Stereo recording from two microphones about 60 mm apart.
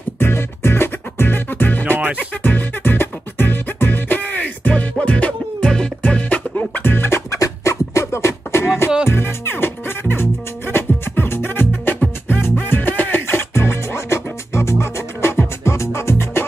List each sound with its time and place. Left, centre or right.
0.2 s music: left
7.2 s beatboxing: left
9.1 s music: left